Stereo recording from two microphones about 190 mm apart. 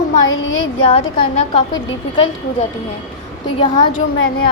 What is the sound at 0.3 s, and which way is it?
Speech, 90° left.